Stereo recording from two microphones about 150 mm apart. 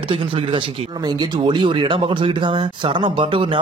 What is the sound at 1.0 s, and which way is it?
Speech, 30° right (ahead or behind).